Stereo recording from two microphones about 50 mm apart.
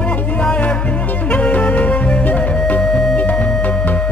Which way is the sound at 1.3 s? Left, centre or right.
Left.